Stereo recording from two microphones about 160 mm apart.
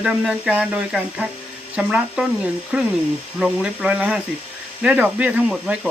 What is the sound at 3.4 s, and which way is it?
Speech, 5° right (ahead or behind).